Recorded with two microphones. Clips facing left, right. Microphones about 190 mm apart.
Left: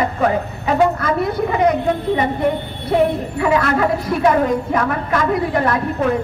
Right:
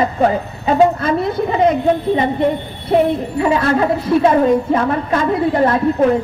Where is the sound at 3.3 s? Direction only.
25° right (ahead or behind).